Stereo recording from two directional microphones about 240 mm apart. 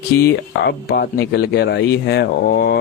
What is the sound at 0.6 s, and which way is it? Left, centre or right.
Speech, left.